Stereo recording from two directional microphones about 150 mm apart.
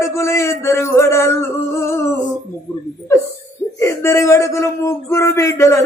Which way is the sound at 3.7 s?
20° left (ahead or behind).